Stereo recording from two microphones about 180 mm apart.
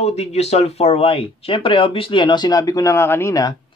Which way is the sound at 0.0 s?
35° left (ahead or behind).